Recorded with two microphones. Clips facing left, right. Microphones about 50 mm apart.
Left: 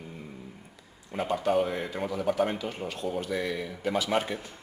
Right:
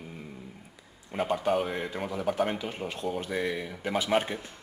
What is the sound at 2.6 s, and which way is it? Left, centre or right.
Speech, centre.